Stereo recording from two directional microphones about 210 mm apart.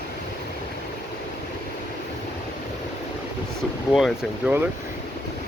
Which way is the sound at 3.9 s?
Centre (ahead or behind).